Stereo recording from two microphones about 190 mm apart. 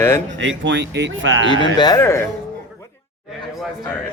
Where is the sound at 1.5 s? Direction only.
25° left (ahead or behind).